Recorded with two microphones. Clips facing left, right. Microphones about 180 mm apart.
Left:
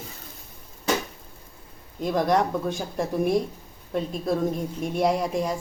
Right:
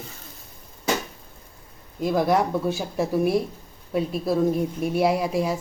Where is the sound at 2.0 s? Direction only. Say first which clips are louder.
Right 1 dB; 5° right (ahead or behind).